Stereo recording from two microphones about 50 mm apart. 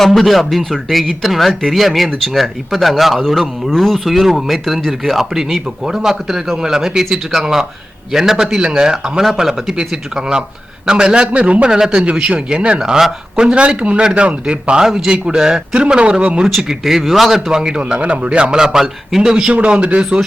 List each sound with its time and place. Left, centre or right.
0.0 s a man's voice: centre
11.3 s speech: right
11.7 s a man's voice: centre
16.5 s speech: centre
17.5 s a man's voice: centre